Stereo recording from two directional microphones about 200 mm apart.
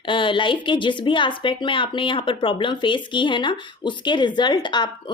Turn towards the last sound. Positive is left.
turn(degrees=20)  # may be behind; listen again after turning